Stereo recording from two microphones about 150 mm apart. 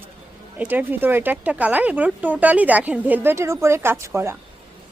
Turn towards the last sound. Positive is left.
turn(degrees=-15)  # may be behind; listen again after turning